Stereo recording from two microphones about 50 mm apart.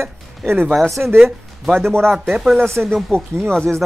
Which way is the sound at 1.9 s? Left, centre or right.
Right.